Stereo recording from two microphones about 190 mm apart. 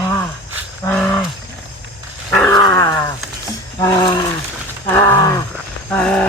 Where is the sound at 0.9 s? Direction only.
5° left (ahead or behind).